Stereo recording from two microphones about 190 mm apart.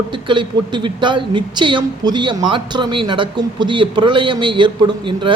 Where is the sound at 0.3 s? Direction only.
25° right (ahead or behind).